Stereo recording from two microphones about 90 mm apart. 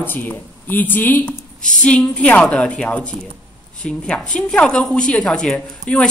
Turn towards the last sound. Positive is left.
turn(degrees=10)  # may be behind; listen again after turning